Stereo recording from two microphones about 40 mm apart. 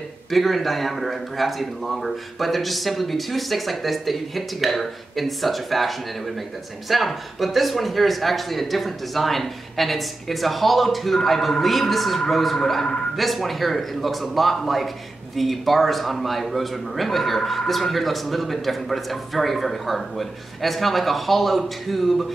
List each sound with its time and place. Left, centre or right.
0.3 s a man's voice: centre